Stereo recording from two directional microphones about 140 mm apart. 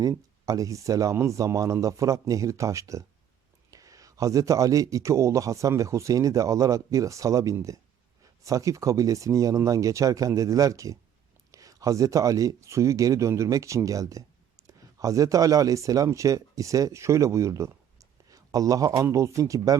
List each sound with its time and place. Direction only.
0.0 s speech: 25° right (ahead or behind)